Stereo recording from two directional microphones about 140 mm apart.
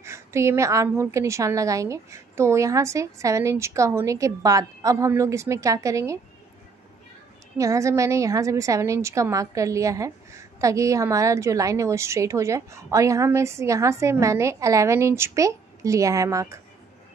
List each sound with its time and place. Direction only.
0.0 s a woman's voice: 20° right (ahead or behind)
7.5 s a woman's voice: 20° right (ahead or behind)